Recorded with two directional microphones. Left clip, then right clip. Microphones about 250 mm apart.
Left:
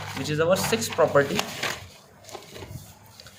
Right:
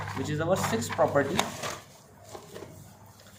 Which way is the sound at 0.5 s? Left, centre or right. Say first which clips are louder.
Left 4 dB; left.